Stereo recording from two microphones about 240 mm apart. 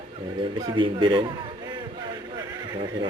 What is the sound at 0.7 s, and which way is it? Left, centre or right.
Speech, centre.